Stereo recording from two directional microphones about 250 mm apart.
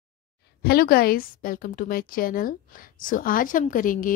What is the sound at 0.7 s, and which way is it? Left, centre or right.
A woman's voice, left.